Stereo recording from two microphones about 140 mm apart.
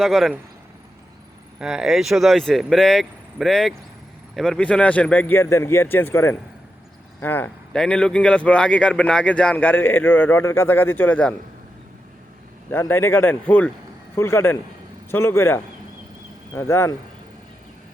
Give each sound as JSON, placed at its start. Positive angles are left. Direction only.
{"t": 0.0, "sound": "speech", "side_deg": 0}
{"t": 1.5, "sound": "speech", "side_deg": -5}
{"t": 12.7, "sound": "speech", "side_deg": 15}